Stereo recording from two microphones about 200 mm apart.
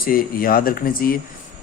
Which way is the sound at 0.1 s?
45° left (ahead or behind).